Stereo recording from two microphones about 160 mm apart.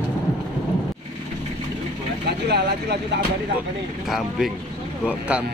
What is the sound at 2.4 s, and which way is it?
Speech, 90° right.